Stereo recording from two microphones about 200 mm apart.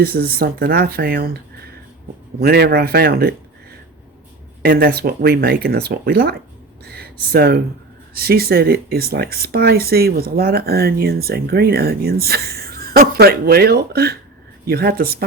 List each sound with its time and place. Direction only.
0.0 s speech: 50° right (ahead or behind)
2.4 s speech: 50° right (ahead or behind)
4.6 s speech: 50° right (ahead or behind)
6.8 s a sound: 50° right (ahead or behind)
8.1 s speech: 50° right (ahead or behind)